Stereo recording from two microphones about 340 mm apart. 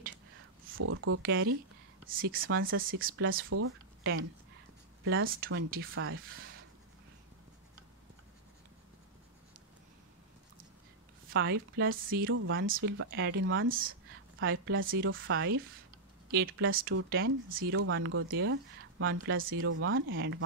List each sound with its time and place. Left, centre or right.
0.7 s speech: right
11.3 s speech: right